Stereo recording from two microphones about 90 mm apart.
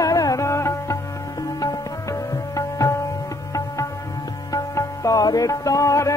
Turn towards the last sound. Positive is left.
turn(degrees=35)  # may be behind; listen again after turning